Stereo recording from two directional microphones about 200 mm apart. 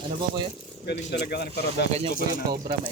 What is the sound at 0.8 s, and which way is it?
Speech, 55° left (ahead or behind).